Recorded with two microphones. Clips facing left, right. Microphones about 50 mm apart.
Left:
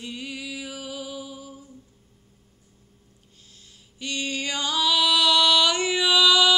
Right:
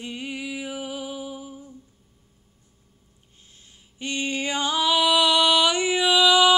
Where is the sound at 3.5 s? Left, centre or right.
Right.